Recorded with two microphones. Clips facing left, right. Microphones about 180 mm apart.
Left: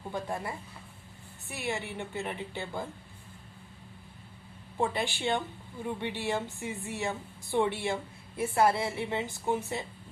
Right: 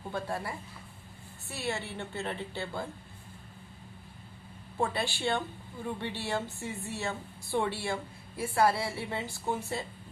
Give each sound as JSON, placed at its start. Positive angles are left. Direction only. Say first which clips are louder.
{"t": 0.1, "sound": "a woman's voice", "louder": "even", "side_deg": 20}
{"t": 4.8, "sound": "a woman's voice", "louder": "left 1 dB", "side_deg": 15}